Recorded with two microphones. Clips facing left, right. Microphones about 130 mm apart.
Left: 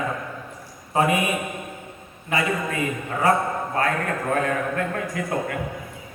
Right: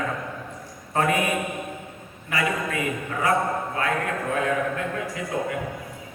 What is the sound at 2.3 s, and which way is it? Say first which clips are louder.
Speech: left 2 dB; 25° left (ahead or behind).